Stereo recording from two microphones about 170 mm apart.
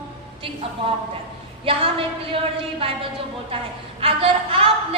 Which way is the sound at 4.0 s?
35° right (ahead or behind).